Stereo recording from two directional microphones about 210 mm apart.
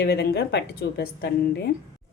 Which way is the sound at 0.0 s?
50° left (ahead or behind).